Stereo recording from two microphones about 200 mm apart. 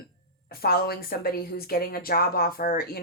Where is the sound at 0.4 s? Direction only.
50° left (ahead or behind).